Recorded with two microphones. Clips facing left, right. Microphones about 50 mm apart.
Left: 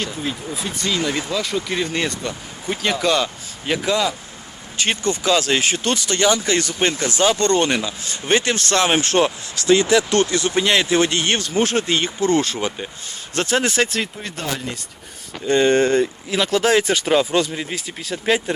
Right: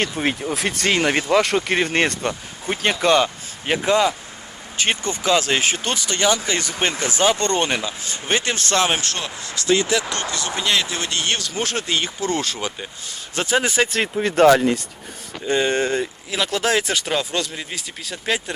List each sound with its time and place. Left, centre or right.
0.0 s speech: right
2.6 s speech: right; by 8.9 s centre
9.0 s speech: left
9.6 s speech: left
10.3 s speech: left; by 13.9 s centre
14.2 s speech: right
14.4 s speech: right
15.4 s speech: centre